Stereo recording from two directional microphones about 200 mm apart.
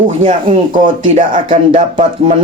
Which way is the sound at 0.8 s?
40° right (ahead or behind).